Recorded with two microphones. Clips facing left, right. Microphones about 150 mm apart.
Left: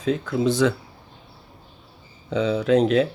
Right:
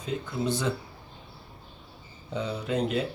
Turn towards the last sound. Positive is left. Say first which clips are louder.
# left 10 dB
turn(degrees=90)